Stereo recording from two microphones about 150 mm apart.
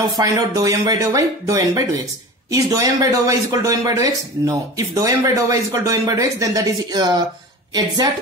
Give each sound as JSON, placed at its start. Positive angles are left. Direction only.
{"t": 0.2, "sound": "speech", "side_deg": -25}